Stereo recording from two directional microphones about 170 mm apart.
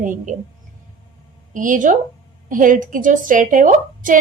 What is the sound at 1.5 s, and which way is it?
A woman's voice, 50° right (ahead or behind).